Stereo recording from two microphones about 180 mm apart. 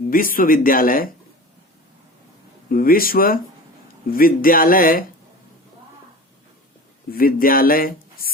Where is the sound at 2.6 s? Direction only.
50° left (ahead or behind).